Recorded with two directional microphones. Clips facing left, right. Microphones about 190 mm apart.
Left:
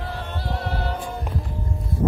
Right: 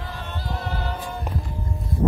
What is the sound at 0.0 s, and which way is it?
A capella, 60° left (ahead or behind).